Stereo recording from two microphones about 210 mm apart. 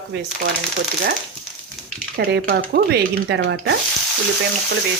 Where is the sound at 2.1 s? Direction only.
45° right (ahead or behind).